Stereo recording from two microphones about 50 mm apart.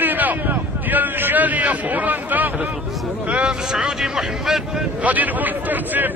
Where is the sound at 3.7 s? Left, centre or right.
Centre.